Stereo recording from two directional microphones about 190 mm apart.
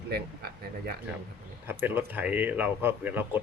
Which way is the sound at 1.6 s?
10° right (ahead or behind).